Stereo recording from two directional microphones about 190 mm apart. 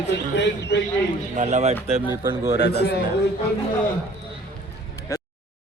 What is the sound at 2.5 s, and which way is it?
Speech, 60° left (ahead or behind).